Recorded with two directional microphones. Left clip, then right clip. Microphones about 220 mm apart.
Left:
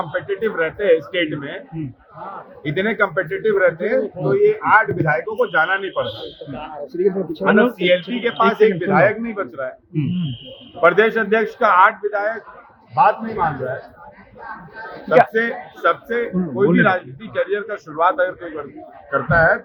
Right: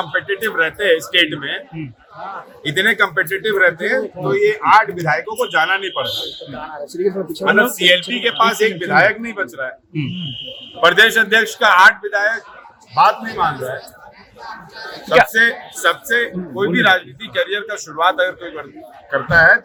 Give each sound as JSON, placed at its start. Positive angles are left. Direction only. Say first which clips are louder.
{"t": 0.0, "sound": "speech", "louder": "right 2 dB", "side_deg": -10}
{"t": 2.6, "sound": "speech", "louder": "right 4 dB", "side_deg": -10}
{"t": 6.8, "sound": "speech", "louder": "left 1 dB", "side_deg": -45}
{"t": 7.4, "sound": "speech", "louder": "right 3 dB", "side_deg": -10}
{"t": 13.2, "sound": "speech", "louder": "right 2 dB", "side_deg": -25}
{"t": 15.1, "sound": "speech", "louder": "right 3 dB", "side_deg": -15}